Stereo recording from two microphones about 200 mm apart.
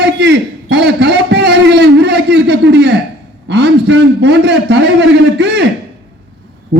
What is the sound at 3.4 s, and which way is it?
A man's voice, 60° right (ahead or behind).